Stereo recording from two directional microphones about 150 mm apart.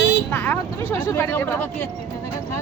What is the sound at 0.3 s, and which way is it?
Vehicle, 15° left (ahead or behind).